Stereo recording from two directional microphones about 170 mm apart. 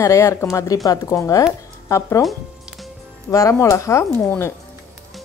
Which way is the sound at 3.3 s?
20° left (ahead or behind).